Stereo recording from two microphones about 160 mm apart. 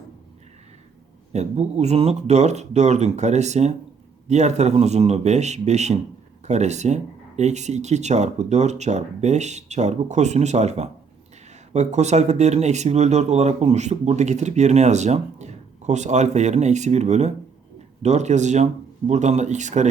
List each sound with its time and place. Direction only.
1.3 s speech: 40° right (ahead or behind)